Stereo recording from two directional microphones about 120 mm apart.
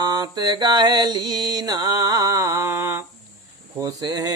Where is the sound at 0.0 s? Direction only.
35° right (ahead or behind).